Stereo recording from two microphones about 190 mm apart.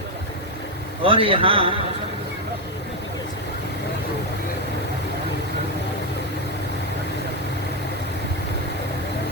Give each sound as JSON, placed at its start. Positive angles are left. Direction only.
{"t": 1.0, "sound": "a man's voice", "side_deg": -30}